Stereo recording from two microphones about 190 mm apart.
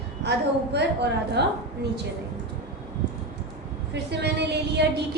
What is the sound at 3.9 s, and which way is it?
Speech, 60° right (ahead or behind).